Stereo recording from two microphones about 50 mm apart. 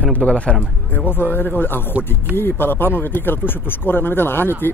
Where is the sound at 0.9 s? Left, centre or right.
Left.